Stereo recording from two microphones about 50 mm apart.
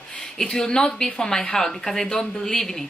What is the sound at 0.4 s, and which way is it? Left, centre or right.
A woman's voice, centre.